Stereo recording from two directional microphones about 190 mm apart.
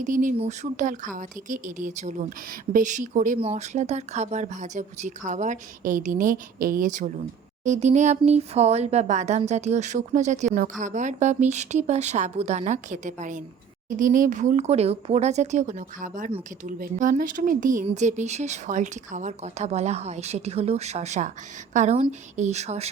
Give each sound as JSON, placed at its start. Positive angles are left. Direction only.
{"t": 0.0, "sound": "speech", "side_deg": -45}